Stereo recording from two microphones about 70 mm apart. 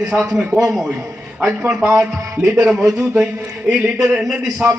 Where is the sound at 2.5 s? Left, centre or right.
Centre.